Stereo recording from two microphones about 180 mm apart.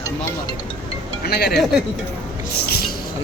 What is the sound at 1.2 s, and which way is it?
Speech, 60° left (ahead or behind).